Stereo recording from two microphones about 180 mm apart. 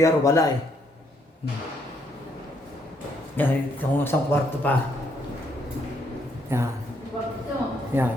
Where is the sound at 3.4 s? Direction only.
10° left (ahead or behind).